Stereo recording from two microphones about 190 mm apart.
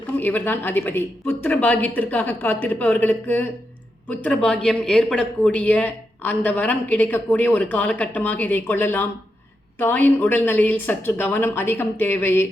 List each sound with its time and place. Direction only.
0.2 s a man's voice: 10° left (ahead or behind)